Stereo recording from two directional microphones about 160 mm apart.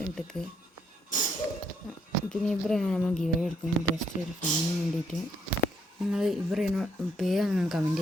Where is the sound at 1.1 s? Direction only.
55° left (ahead or behind).